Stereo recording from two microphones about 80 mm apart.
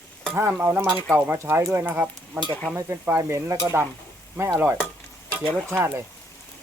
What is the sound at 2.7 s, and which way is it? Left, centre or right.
Speech, right.